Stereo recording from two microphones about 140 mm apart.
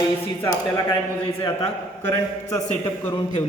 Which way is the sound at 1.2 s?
40° left (ahead or behind).